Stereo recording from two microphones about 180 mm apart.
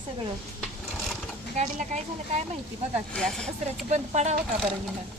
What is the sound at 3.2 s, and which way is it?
Speech, 5° left (ahead or behind).